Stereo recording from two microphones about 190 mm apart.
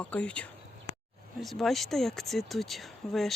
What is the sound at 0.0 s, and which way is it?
Speech, 5° left (ahead or behind).